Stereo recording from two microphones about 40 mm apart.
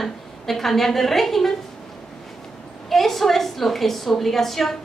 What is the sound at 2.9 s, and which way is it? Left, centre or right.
A woman's voice, centre.